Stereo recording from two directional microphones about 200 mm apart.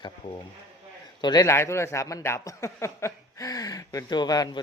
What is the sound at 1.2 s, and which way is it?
Speech, 20° left (ahead or behind).